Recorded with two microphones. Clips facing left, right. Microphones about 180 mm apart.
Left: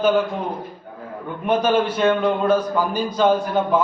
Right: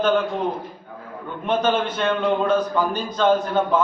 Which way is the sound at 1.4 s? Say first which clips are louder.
Left 2 dB; 10° left (ahead or behind).